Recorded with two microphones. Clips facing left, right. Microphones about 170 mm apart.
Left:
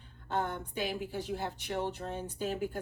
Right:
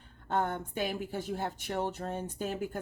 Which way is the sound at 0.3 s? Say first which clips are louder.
Right 3 dB; 50° right (ahead or behind).